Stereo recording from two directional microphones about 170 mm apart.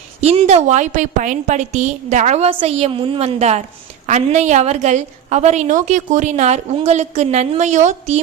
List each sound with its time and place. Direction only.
0.2 s a woman's voice: 40° right (ahead or behind)